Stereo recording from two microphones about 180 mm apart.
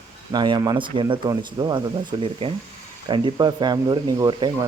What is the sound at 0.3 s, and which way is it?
Speech, 25° right (ahead or behind).